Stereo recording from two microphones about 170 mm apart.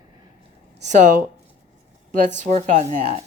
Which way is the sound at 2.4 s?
45° right (ahead or behind).